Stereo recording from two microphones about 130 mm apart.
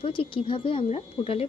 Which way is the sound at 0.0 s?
45° left (ahead or behind).